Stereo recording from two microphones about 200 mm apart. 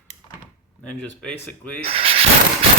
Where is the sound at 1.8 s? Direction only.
30° right (ahead or behind).